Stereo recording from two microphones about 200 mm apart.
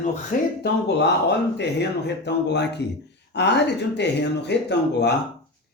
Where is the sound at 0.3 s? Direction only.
45° left (ahead or behind).